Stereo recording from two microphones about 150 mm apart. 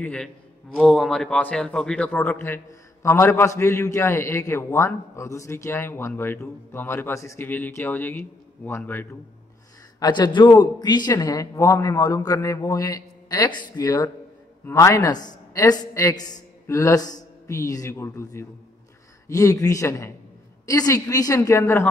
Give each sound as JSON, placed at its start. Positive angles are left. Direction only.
{"t": 0.0, "sound": "a man's voice", "side_deg": 10}
{"t": 9.9, "sound": "speech", "side_deg": 25}